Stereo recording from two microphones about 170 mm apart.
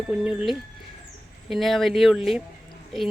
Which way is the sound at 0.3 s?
5° right (ahead or behind).